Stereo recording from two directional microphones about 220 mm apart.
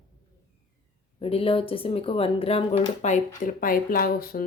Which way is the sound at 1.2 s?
25° left (ahead or behind).